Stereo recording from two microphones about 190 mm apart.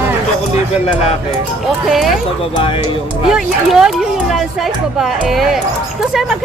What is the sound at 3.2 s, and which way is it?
Speech, centre (ahead or behind).